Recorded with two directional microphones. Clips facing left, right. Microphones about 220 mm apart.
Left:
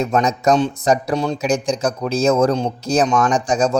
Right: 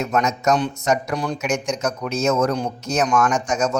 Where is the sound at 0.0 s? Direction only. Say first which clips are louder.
Left 3 dB; 30° left (ahead or behind).